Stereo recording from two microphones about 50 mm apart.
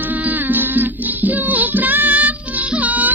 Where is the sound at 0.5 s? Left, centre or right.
Right.